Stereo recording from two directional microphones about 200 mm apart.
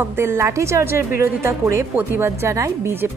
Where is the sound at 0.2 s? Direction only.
15° right (ahead or behind).